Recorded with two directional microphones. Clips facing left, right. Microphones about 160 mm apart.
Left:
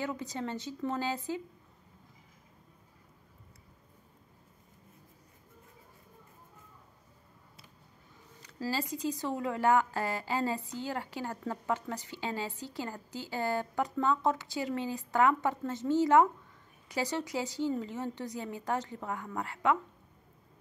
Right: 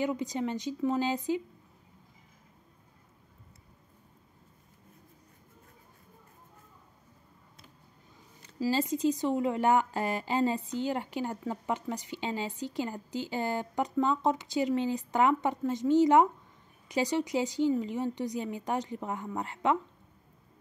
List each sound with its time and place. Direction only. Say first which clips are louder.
0.0 s a woman's voice: right 5 dB; 15° right (ahead or behind)
8.5 s a woman's voice: right 6 dB; 20° right (ahead or behind)